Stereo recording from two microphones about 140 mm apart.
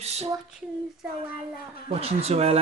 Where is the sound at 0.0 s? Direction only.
50° right (ahead or behind).